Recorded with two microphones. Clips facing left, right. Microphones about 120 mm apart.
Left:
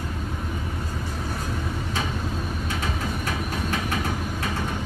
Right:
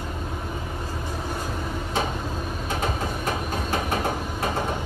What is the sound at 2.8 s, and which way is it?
Train, 40° right (ahead or behind).